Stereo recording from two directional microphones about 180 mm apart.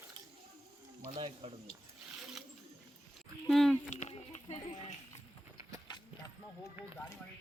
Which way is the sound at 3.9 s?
40° left (ahead or behind).